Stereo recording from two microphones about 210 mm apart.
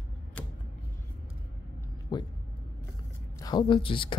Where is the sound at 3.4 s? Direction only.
20° left (ahead or behind).